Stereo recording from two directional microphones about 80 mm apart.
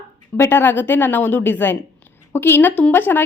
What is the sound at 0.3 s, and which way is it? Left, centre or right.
A woman's voice, left.